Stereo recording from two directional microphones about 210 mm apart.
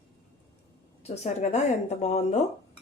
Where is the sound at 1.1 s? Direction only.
30° left (ahead or behind).